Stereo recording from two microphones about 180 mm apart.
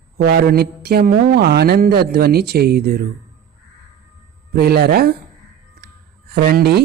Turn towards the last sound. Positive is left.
turn(degrees=-55)  # may be behind; listen again after turning